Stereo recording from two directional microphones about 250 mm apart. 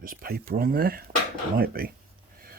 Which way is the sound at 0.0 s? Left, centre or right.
Right.